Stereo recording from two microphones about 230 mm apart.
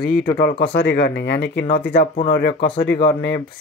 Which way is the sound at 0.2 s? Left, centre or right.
Left.